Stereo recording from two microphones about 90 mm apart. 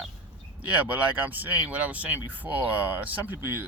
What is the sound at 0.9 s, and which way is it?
Speech, 15° right (ahead or behind).